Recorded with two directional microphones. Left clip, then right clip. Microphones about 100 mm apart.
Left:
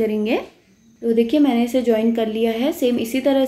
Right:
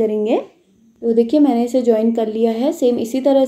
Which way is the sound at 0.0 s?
50° right (ahead or behind).